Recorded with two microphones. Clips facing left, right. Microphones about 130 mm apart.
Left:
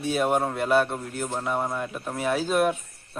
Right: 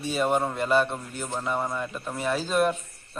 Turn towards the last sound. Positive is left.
turn(degrees=5)  # may be behind; listen again after turning